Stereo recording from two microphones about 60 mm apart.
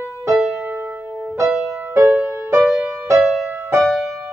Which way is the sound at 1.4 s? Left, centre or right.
Right.